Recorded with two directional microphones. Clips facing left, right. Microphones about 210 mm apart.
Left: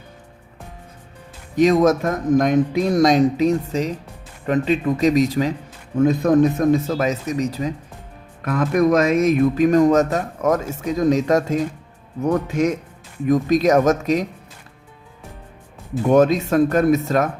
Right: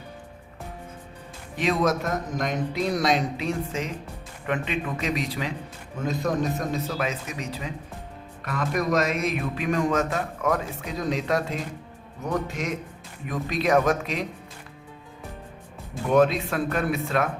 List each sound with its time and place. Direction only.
1.5 s a man's voice: 45° left (ahead or behind)
16.0 s speech: 45° left (ahead or behind)